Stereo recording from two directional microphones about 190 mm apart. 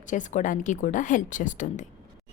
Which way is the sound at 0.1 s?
40° left (ahead or behind).